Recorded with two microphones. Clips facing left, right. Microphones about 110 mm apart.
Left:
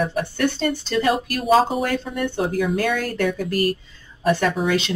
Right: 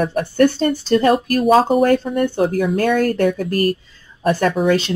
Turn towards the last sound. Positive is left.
turn(degrees=-45)  # may be behind; listen again after turning